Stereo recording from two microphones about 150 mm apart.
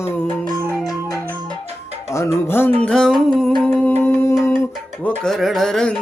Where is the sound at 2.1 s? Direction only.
20° left (ahead or behind).